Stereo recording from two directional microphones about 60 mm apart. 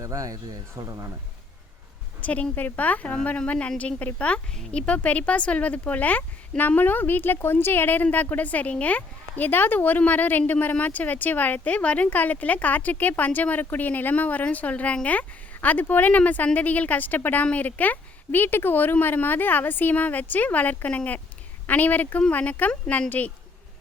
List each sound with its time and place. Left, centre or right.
0.0 s speech: right
2.2 s a woman's voice: left